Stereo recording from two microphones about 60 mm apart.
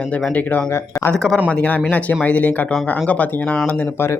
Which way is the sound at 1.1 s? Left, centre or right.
Centre.